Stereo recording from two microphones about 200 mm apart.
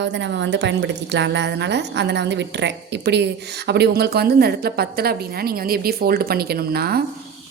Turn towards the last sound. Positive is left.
turn(degrees=-50)  # may be behind; listen again after turning